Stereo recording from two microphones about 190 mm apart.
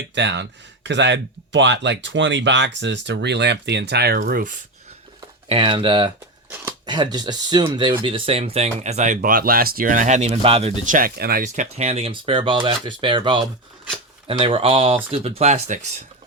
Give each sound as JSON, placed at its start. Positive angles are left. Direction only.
{"t": 0.1, "sound": "speech", "side_deg": -70}
{"t": 5.5, "sound": "speech", "side_deg": -25}